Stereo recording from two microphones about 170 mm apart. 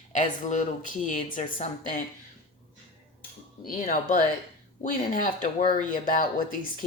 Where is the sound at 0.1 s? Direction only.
45° left (ahead or behind).